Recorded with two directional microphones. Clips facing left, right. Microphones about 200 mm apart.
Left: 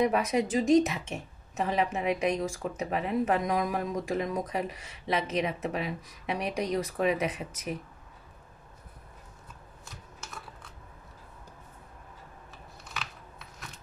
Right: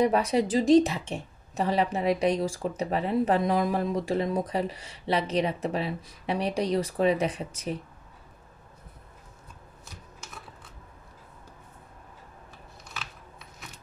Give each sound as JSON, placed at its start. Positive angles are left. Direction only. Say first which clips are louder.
{"t": 0.0, "sound": "a woman's voice", "louder": "right 3 dB", "side_deg": -30}